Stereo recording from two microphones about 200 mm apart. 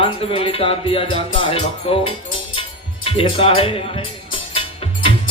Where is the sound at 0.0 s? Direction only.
30° left (ahead or behind).